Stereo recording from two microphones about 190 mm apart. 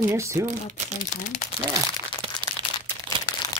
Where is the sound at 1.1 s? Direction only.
40° left (ahead or behind).